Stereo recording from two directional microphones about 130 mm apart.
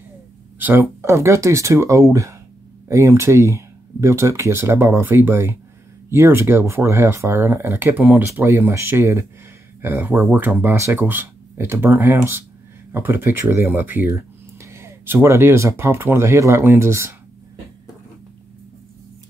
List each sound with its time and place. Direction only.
0.6 s speech: 15° right (ahead or behind)